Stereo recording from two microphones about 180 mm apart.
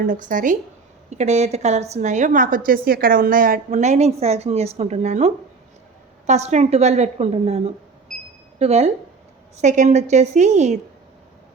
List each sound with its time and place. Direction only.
0.0 s a woman's voice: 45° right (ahead or behind)